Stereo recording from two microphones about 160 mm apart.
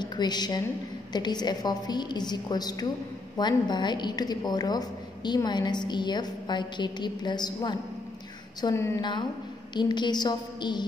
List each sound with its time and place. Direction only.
0.0 s a woman's voice: 25° left (ahead or behind)